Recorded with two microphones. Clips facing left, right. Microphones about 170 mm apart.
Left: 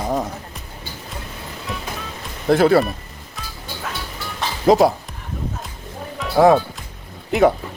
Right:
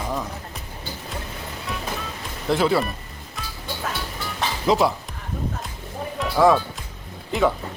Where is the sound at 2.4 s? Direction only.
50° left (ahead or behind).